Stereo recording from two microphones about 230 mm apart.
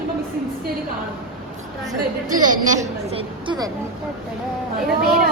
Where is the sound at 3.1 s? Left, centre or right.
Right.